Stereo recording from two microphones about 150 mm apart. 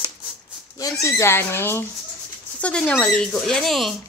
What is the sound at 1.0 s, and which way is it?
Speech, 15° left (ahead or behind).